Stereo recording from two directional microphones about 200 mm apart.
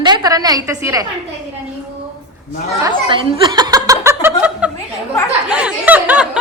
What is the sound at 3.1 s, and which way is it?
Chuckle, 20° right (ahead or behind).